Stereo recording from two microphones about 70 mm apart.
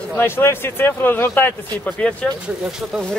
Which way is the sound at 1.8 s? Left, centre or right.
Centre.